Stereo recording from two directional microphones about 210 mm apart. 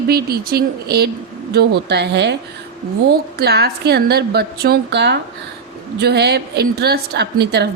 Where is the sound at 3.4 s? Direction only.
50° right (ahead or behind).